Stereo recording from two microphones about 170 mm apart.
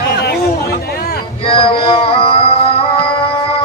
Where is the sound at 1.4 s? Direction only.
30° left (ahead or behind).